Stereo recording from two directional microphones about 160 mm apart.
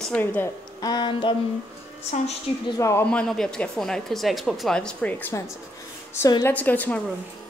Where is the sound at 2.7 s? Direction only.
15° left (ahead or behind).